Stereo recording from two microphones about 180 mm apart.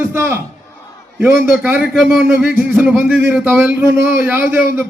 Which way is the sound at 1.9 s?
Centre (ahead or behind).